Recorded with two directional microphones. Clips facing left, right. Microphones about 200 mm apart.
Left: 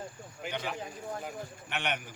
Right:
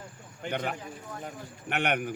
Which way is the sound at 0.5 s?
55° right (ahead or behind).